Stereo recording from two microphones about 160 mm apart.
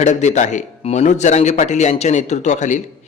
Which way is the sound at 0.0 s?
45° left (ahead or behind).